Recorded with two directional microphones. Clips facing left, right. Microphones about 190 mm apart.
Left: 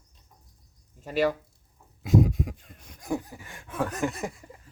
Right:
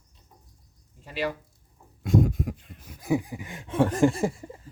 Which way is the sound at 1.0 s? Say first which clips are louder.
Left 5 dB; 45° left (ahead or behind).